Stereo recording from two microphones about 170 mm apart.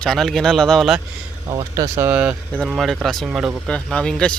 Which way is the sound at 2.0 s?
10° right (ahead or behind).